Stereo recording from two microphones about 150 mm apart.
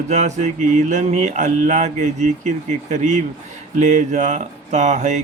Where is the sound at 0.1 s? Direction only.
50° right (ahead or behind).